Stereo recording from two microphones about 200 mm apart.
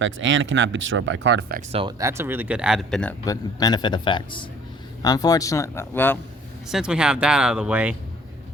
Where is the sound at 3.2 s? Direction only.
20° left (ahead or behind).